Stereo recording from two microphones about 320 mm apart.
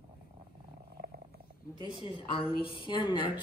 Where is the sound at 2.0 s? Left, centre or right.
Centre.